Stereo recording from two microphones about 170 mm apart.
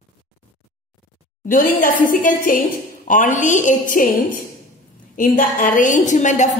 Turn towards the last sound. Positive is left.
turn(degrees=45)  # may be behind; listen again after turning